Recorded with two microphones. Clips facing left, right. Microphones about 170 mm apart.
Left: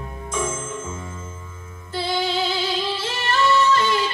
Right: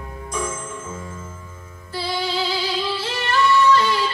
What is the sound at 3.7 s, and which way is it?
Music, 25° left (ahead or behind).